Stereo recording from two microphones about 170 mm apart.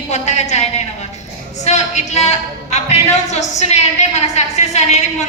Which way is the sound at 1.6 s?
40° left (ahead or behind).